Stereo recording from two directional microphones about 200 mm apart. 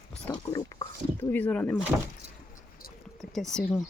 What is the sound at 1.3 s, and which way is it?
Speech, 5° left (ahead or behind).